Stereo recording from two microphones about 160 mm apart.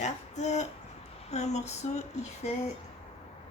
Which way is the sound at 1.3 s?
45° left (ahead or behind).